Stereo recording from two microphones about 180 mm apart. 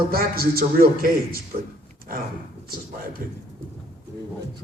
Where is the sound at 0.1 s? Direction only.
55° right (ahead or behind).